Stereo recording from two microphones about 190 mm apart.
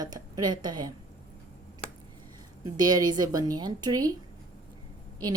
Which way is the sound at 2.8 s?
20° right (ahead or behind).